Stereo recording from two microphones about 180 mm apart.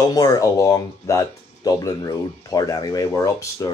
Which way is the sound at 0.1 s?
20° left (ahead or behind).